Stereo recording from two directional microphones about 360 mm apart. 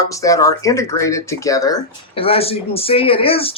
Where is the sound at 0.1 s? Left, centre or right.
Centre.